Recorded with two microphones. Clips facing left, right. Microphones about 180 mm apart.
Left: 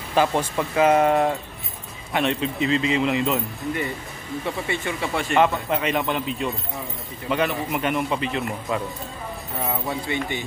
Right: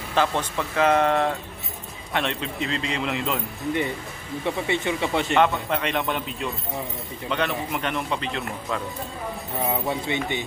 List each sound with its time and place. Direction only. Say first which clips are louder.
0.1 s a man's voice: left 3 dB; 10° left (ahead or behind)
4.5 s speech: right 3 dB; 20° right (ahead or behind)
5.4 s a man's voice: left 4 dB; 5° left (ahead or behind)
9.6 s speech: right 1 dB; 20° right (ahead or behind)